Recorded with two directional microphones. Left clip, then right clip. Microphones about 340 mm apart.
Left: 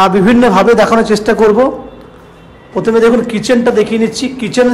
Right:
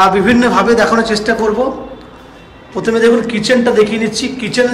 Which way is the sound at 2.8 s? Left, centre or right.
Centre.